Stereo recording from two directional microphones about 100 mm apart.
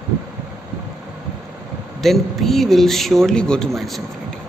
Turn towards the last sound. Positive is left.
turn(degrees=0)  # may be behind; listen again after turning